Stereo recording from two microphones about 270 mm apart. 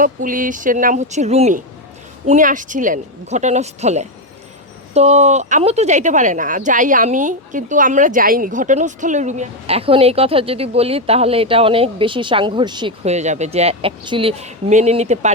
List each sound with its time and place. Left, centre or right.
0.0 s speech: right